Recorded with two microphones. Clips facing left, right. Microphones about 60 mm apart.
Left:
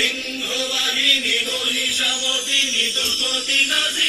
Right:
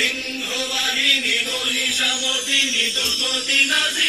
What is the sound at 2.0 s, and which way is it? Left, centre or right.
Music, right.